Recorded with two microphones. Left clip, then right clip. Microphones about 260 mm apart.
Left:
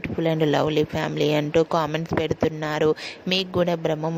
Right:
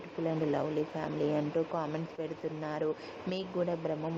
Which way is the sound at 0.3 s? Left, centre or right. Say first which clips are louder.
Left 11 dB; left.